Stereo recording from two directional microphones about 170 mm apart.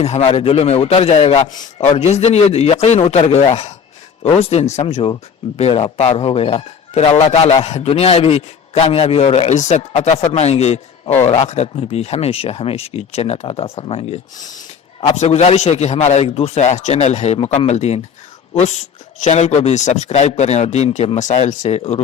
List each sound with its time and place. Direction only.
0.0 s speech: 40° left (ahead or behind)